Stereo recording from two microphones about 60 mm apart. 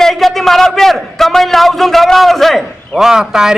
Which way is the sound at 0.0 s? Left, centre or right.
Centre.